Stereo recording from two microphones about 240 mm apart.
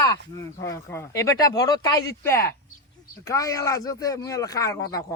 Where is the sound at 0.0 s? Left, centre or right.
Centre.